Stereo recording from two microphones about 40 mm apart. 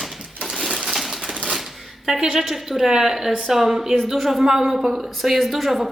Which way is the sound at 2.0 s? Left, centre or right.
Centre.